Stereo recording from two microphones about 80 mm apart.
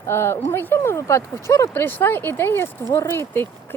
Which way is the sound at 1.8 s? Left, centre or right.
Left.